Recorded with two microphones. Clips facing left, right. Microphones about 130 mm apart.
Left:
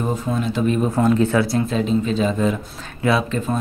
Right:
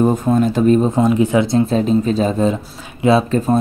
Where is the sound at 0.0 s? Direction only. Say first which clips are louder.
Right 8 dB; 45° right (ahead or behind).